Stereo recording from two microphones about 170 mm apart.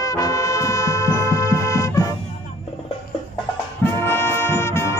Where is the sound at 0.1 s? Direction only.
20° left (ahead or behind).